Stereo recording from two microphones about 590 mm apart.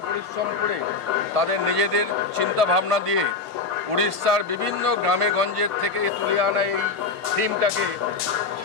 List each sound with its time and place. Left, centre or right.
1.4 s speech: right